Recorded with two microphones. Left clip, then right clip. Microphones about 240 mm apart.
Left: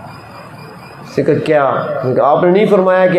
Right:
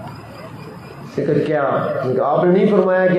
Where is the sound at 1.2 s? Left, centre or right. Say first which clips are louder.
Left 6 dB; left.